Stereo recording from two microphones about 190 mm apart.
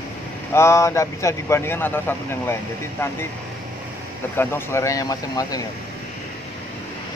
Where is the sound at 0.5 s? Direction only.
15° left (ahead or behind).